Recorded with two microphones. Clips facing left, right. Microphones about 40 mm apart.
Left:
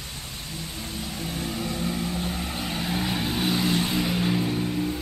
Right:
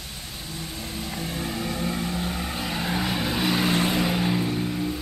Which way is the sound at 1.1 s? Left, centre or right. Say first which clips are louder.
Right 1 dB; centre.